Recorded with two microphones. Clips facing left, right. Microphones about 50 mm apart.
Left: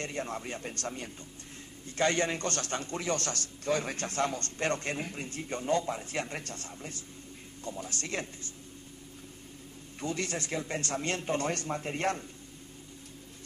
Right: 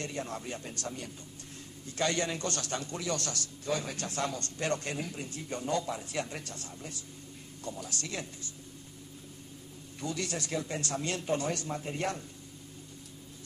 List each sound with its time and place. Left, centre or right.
0.0 s a man's voice: left
7.8 s a man's voice: left
9.9 s a man's voice: left